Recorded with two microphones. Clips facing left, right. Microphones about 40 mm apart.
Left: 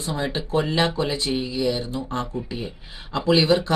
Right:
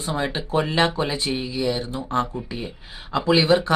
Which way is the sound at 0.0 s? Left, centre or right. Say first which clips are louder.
Right 1 dB; right.